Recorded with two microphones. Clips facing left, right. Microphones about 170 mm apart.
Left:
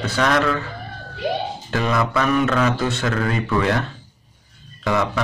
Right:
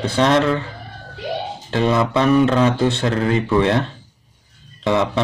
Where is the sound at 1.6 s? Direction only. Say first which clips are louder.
Right 5 dB; 25° right (ahead or behind).